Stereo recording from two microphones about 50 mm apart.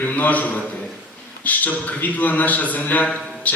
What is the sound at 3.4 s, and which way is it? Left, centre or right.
Music, left.